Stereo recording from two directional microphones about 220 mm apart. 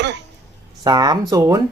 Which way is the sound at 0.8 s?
20° right (ahead or behind).